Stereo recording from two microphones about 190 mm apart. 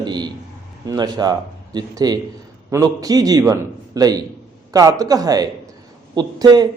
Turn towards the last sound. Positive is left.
turn(degrees=-20)  # may be behind; listen again after turning